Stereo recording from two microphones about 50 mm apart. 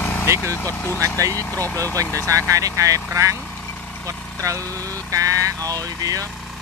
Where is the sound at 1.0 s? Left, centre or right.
Right.